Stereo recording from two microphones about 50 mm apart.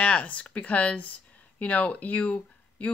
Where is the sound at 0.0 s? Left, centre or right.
Left.